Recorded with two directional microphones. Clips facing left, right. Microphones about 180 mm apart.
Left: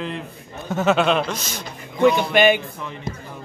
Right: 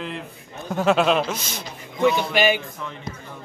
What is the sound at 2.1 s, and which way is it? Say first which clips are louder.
Speech: left 4 dB; 55° left (ahead or behind).